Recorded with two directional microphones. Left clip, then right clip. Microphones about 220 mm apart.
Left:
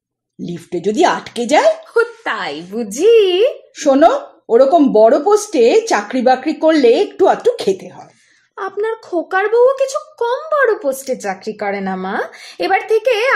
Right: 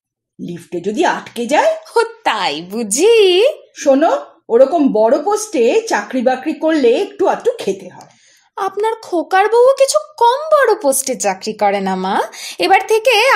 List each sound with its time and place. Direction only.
0.4 s speech: 35° left (ahead or behind)
2.0 s speech: 40° right (ahead or behind)
3.7 s speech: 35° left (ahead or behind)
8.5 s speech: 35° right (ahead or behind)